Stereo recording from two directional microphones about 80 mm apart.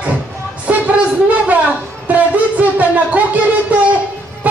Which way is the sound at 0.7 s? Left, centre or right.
Centre.